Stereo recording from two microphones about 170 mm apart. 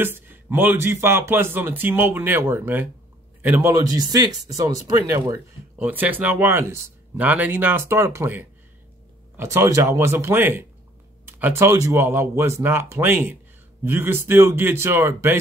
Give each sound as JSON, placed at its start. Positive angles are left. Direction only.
{"t": 0.0, "sound": "speech", "side_deg": -10}
{"t": 5.9, "sound": "speech", "side_deg": -10}